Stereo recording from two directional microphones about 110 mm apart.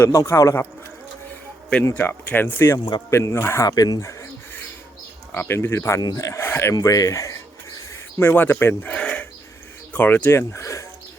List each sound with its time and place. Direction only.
0.0 s speech: 25° left (ahead or behind)
1.8 s speech: 20° left (ahead or behind)
3.7 s speech: 35° left (ahead or behind)
5.3 s speech: 20° left (ahead or behind)
6.0 s speech: 35° left (ahead or behind)
6.7 s speech: 35° left (ahead or behind)
8.2 s speech: 20° left (ahead or behind)
10.5 s speech: 25° left (ahead or behind)